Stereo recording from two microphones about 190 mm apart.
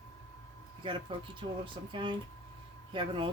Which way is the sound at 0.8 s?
25° right (ahead or behind).